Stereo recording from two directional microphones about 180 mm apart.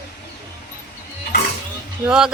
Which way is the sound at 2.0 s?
5° right (ahead or behind).